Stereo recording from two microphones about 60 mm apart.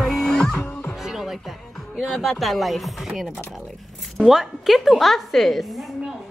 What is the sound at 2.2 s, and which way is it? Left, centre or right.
A woman's voice, centre.